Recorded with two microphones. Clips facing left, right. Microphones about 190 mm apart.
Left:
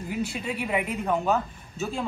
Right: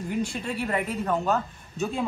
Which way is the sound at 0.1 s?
5° left (ahead or behind).